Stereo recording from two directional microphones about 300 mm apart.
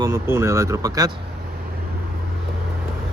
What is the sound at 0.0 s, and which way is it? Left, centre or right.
Speech, centre.